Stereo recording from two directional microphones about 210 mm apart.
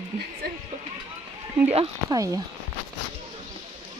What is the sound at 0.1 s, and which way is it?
Speech, 35° right (ahead or behind).